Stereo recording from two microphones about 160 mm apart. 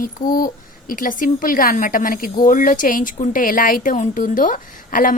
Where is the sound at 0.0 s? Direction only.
60° left (ahead or behind).